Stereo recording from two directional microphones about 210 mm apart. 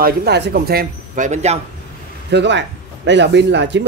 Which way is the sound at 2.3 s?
55° right (ahead or behind).